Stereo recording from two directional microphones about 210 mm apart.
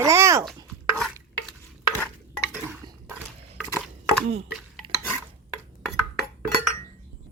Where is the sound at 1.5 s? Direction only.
10° left (ahead or behind).